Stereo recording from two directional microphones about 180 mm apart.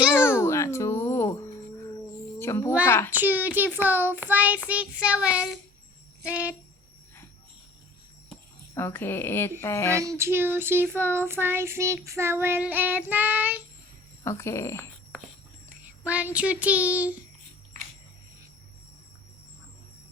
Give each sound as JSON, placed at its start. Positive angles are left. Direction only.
{"t": 0.3, "sound": "a sound", "side_deg": 15}
{"t": 2.4, "sound": "a child's voice", "side_deg": 15}
{"t": 3.1, "sound": "child singing", "side_deg": -10}
{"t": 8.7, "sound": "a woman's voice", "side_deg": 10}
{"t": 10.0, "sound": "child singing", "side_deg": -15}
{"t": 14.3, "sound": "a woman's voice", "side_deg": 15}
{"t": 15.8, "sound": "speech", "side_deg": -10}